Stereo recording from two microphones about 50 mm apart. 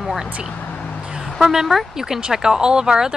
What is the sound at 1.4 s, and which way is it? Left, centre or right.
A woman's voice, centre.